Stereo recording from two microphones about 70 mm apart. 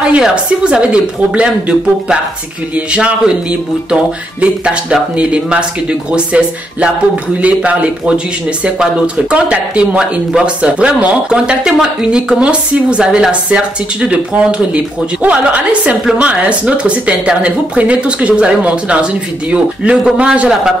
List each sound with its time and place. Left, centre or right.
0.0 s a woman's voice: centre